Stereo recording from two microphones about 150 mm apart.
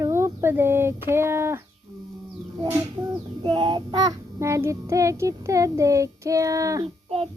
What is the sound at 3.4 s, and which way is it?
Child singing, 30° right (ahead or behind).